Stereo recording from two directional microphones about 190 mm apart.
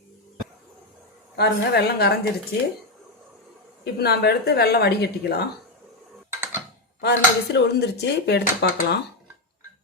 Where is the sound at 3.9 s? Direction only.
55° left (ahead or behind).